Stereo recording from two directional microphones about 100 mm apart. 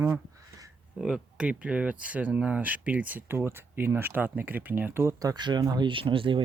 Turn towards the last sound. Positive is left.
turn(degrees=-60)  # may be behind; listen again after turning